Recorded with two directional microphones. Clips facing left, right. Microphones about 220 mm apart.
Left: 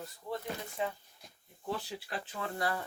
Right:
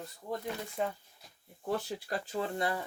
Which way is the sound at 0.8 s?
45° right (ahead or behind).